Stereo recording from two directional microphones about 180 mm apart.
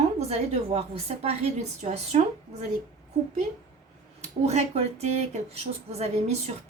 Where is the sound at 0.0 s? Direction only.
35° right (ahead or behind).